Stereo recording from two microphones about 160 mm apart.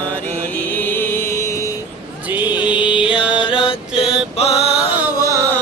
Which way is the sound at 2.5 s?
30° left (ahead or behind).